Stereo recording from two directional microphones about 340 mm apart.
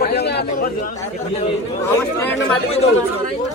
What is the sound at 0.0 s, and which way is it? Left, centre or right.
Chatter, left.